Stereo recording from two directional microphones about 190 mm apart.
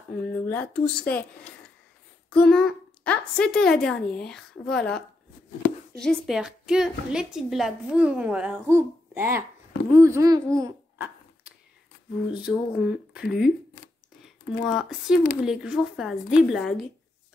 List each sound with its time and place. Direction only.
0.1 s speech: 10° left (ahead or behind)
2.3 s a woman's voice: centre (ahead or behind); by 11.1 s 20° right (ahead or behind)
12.3 s a woman's voice: 5° right (ahead or behind)
14.6 s a woman's voice: centre (ahead or behind)